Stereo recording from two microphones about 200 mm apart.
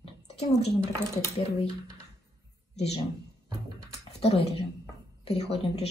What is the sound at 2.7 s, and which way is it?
Speech, 30° left (ahead or behind).